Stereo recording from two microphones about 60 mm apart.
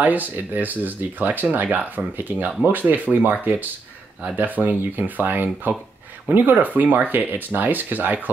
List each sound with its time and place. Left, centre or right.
0.0 s speech: right
4.4 s speech: right